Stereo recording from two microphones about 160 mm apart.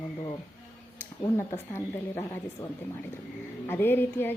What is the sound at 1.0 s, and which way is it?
A woman's voice, 15° left (ahead or behind).